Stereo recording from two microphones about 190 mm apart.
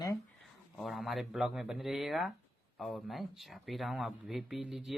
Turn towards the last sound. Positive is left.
turn(degrees=0)  # may be behind; listen again after turning